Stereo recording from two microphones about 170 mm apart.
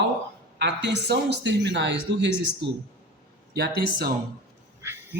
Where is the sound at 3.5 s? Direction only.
65° right (ahead or behind).